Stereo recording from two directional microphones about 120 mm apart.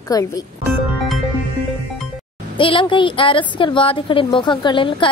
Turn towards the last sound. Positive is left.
turn(degrees=45)  # may be behind; listen again after turning